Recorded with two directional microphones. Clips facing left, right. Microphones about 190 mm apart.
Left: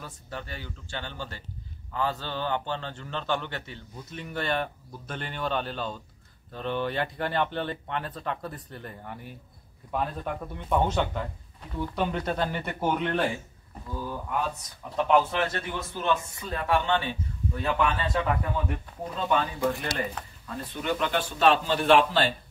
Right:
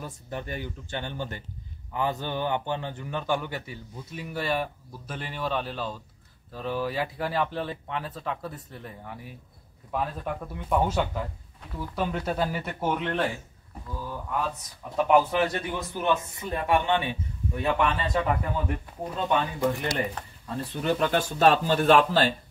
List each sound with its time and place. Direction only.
0.0 s a man's voice: 15° right (ahead or behind); by 13.2 s centre (ahead or behind)
15.0 s a man's voice: 10° right (ahead or behind)
17.7 s speech: centre (ahead or behind)
19.1 s a man's voice: 15° right (ahead or behind)
20.8 s speech: 40° right (ahead or behind)